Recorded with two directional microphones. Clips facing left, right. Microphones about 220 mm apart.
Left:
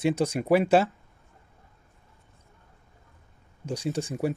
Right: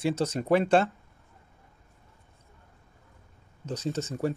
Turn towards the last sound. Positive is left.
turn(degrees=15)  # may be behind; listen again after turning